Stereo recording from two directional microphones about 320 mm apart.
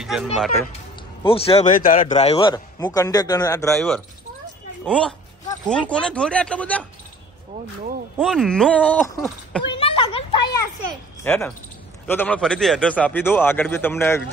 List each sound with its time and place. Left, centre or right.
0.0 s speech: centre
1.2 s a man's voice: centre
8.2 s speech: centre
9.7 s a sound: centre
11.2 s a man's voice: centre